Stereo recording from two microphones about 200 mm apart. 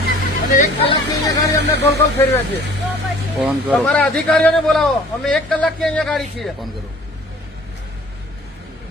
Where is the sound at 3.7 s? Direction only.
5° left (ahead or behind).